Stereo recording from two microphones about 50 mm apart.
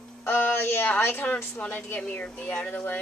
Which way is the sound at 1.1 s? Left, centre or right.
Left.